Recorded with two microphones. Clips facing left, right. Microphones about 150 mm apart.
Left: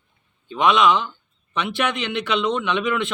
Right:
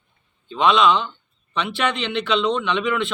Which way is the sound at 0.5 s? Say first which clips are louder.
Even; 15° left (ahead or behind).